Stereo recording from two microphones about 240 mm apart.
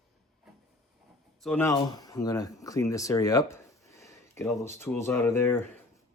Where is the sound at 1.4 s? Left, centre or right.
Centre.